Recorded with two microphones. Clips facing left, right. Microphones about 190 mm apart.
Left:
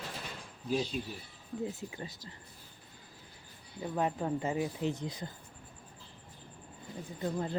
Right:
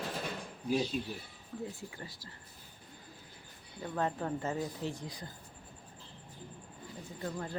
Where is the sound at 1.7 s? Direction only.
20° left (ahead or behind).